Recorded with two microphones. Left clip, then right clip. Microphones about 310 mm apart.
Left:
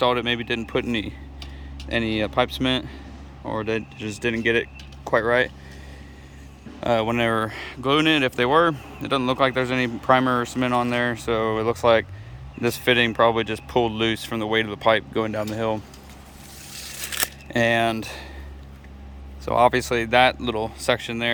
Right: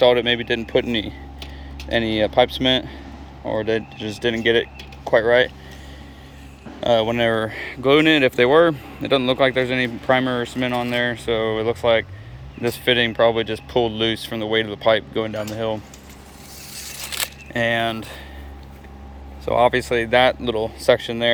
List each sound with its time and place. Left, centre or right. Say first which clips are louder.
0.0 s speech: right 6 dB; centre
6.8 s speech: right 4 dB; centre
17.1 s single-lens reflex camera: even; centre
19.5 s speech: right 1 dB; centre